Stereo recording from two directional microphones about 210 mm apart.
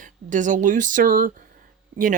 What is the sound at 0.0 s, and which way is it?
Speech, 40° right (ahead or behind).